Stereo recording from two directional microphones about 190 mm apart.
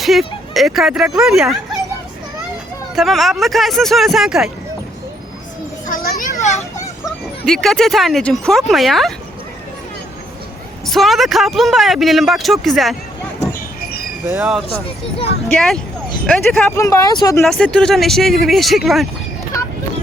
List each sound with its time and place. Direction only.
0.0 s speech: centre (ahead or behind)
2.9 s a man's voice: centre (ahead or behind)
5.8 s children playing: 50° left (ahead or behind)
7.4 s a man's voice: centre (ahead or behind)
10.8 s a man's voice: centre (ahead or behind)
14.4 s a man's voice: centre (ahead or behind)
14.8 s speech: 30° left (ahead or behind)
15.4 s a man's voice: 5° left (ahead or behind)
16.7 s speech: 15° left (ahead or behind)
17.4 s a man's voice: 5° left (ahead or behind)